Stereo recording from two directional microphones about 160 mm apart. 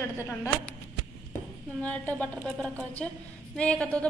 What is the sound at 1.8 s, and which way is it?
A woman's voice, 10° left (ahead or behind).